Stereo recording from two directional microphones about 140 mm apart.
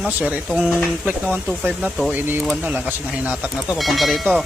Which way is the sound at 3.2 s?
5° right (ahead or behind).